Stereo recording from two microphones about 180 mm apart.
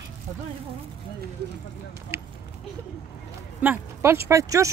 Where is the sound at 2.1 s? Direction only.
15° right (ahead or behind).